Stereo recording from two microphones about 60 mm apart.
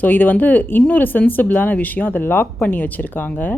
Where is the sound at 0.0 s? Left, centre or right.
Left.